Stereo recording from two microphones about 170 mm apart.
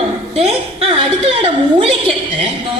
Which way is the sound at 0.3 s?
35° right (ahead or behind).